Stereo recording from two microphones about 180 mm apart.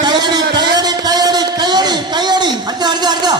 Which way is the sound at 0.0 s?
25° right (ahead or behind).